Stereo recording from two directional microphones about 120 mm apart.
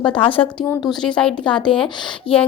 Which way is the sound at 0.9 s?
5° left (ahead or behind).